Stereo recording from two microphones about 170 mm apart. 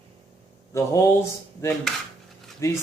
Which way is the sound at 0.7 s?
15° left (ahead or behind).